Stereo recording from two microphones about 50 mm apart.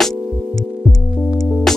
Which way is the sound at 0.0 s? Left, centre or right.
Centre.